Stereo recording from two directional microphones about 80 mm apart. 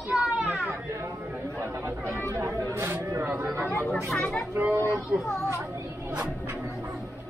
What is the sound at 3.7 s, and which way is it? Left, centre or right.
Chatter, left.